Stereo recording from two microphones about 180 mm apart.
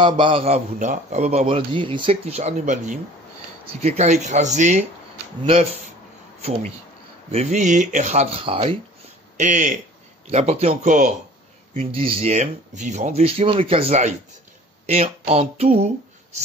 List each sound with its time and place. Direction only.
0.0 s a man's voice: 30° right (ahead or behind)
7.2 s a man's voice: 35° right (ahead or behind)
9.4 s a man's voice: 45° right (ahead or behind)